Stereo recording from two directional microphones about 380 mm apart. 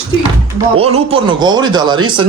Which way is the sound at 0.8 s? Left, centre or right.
Centre.